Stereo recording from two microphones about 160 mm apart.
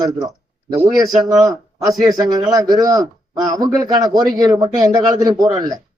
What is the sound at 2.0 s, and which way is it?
A man's voice, 25° right (ahead or behind).